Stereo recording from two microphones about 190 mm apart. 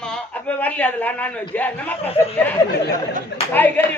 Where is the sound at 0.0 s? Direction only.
5° left (ahead or behind).